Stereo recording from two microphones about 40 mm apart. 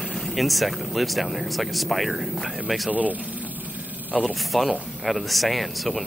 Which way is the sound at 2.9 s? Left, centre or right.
Right.